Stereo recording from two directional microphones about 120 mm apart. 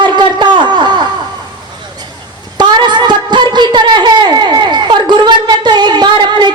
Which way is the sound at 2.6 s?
40° right (ahead or behind).